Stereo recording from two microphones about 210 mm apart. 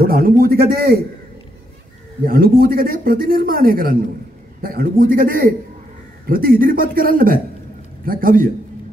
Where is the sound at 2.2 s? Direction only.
45° right (ahead or behind).